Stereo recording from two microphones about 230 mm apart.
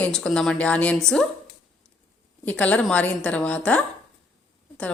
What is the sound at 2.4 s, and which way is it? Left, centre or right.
Speech, centre.